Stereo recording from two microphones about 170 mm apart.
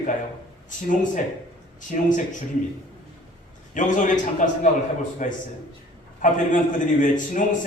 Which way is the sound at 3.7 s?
50° left (ahead or behind).